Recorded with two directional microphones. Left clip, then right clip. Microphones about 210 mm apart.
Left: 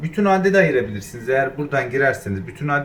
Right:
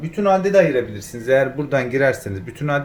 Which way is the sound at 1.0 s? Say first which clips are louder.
Right 3 dB; 25° right (ahead or behind).